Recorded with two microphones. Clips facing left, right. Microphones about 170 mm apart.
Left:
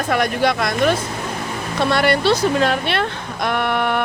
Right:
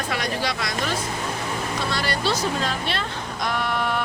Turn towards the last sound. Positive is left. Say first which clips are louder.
# left 5 dB
turn(degrees=60)  # may be behind; listen again after turning